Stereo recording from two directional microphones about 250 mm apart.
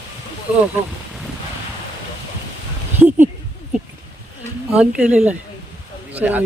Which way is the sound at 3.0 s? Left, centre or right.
Centre.